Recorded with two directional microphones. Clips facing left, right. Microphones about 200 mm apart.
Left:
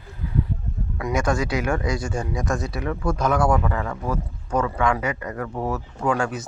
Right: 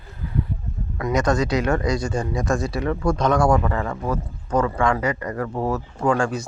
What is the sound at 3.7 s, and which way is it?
Speech, 5° right (ahead or behind).